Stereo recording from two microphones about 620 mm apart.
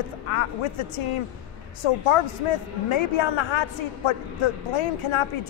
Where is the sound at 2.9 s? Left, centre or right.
Left.